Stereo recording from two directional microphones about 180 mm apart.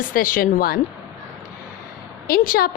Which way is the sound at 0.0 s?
50° left (ahead or behind).